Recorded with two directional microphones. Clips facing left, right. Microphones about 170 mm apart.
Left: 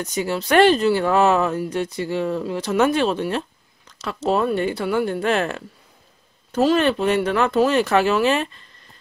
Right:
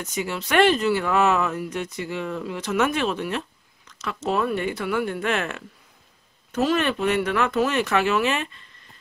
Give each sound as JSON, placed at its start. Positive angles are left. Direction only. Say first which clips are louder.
{"t": 0.0, "sound": "speech", "louder": "left 5 dB", "side_deg": 35}